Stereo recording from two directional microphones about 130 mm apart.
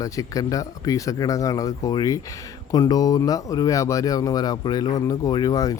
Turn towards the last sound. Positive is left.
turn(degrees=25)  # may be behind; listen again after turning